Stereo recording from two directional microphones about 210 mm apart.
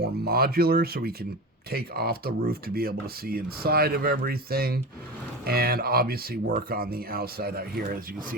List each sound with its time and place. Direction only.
0.0 s speech: 45° right (ahead or behind)